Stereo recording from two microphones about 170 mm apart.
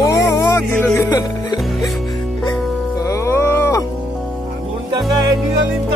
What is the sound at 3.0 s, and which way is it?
Music, 15° left (ahead or behind).